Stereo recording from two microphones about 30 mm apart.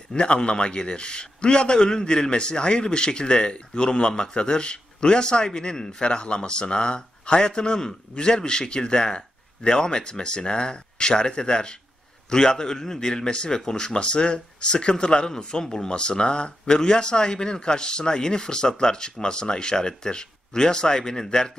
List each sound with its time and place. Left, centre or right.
0.1 s a man's voice: left
13.9 s a man's voice: left
15.9 s speech: left